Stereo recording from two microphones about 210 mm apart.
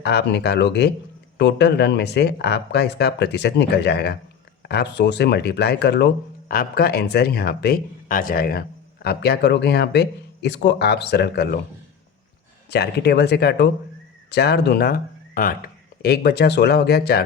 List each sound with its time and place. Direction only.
0.0 s speech: 50° left (ahead or behind)
12.7 s speech: 50° left (ahead or behind)